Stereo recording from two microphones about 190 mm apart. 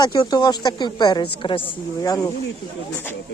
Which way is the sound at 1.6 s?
15° left (ahead or behind).